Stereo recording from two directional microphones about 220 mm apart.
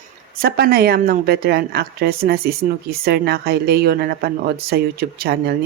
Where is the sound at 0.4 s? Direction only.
45° right (ahead or behind).